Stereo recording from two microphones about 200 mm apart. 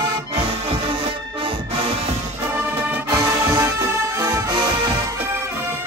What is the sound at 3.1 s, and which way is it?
Music, 15° right (ahead or behind).